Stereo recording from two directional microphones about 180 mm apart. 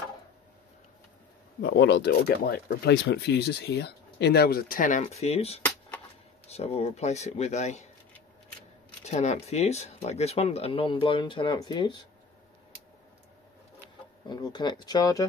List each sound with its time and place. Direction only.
1.6 s speech: 65° left (ahead or behind); by 5.0 s 45° left (ahead or behind)
5.0 s speech: 35° left (ahead or behind)
9.0 s speech: 40° left (ahead or behind); by 12.0 s 25° left (ahead or behind)
14.3 s speech: 25° left (ahead or behind)